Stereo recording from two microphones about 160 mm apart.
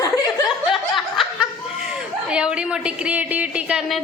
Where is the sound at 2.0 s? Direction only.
5° right (ahead or behind).